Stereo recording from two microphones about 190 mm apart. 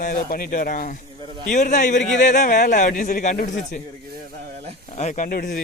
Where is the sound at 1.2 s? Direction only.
25° right (ahead or behind).